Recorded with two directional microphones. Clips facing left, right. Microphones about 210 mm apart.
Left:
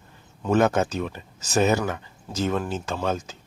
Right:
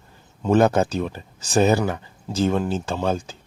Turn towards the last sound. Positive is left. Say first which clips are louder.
# right 3 dB
turn(degrees=-30)  # may be behind; listen again after turning